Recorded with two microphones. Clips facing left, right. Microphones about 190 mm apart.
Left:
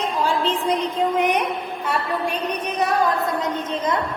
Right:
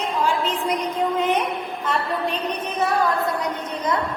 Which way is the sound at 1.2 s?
15° left (ahead or behind).